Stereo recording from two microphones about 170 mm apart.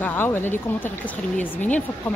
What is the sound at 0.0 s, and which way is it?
Speech, 10° left (ahead or behind).